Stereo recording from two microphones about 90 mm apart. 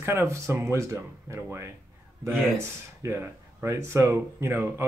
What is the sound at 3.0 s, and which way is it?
Speech, 30° right (ahead or behind).